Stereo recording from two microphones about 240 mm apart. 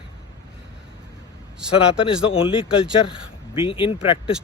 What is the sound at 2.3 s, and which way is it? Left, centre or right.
Speech, left.